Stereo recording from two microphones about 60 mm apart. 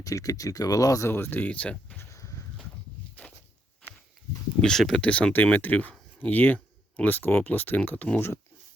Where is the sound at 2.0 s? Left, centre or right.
Left.